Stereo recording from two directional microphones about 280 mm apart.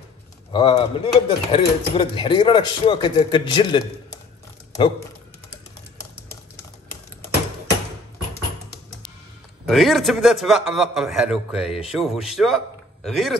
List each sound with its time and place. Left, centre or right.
0.5 s a man's voice: centre
9.7 s a man's voice: centre